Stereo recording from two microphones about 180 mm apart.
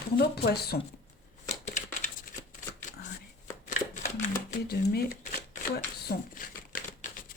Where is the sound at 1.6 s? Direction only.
40° left (ahead or behind).